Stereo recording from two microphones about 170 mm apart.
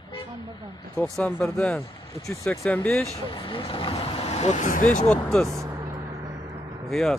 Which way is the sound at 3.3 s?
30° left (ahead or behind).